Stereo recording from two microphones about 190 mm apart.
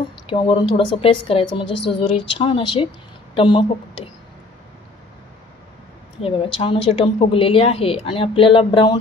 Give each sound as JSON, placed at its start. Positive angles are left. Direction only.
{"t": 0.3, "sound": "a woman's voice", "side_deg": 30}
{"t": 6.2, "sound": "a woman's voice", "side_deg": 30}